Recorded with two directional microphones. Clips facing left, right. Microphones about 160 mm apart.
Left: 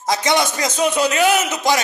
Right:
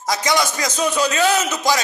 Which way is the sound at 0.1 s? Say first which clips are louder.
Left 2 dB; 25° left (ahead or behind).